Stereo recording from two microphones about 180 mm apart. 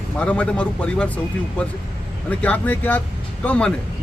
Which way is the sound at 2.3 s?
5° left (ahead or behind).